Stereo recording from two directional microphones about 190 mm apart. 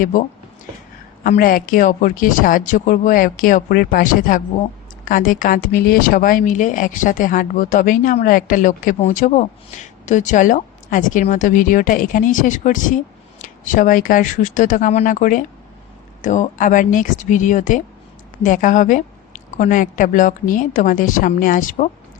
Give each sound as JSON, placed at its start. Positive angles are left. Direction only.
{"t": 0.0, "sound": "speech", "side_deg": 45}